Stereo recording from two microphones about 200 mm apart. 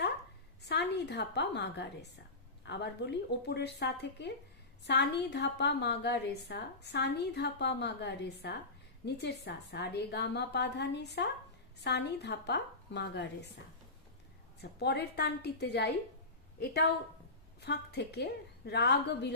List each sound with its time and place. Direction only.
0.6 s a woman's voice: 55° left (ahead or behind)
14.6 s a woman's voice: 55° left (ahead or behind)